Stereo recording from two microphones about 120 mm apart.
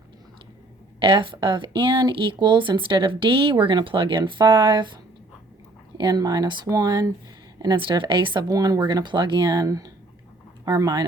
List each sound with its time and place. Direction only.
0.9 s speech: 45° right (ahead or behind)
6.0 s speech: 35° right (ahead or behind)
8.4 s speech: 30° right (ahead or behind)